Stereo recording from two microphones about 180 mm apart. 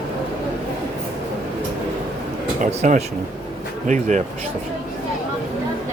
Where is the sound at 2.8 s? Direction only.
45° right (ahead or behind).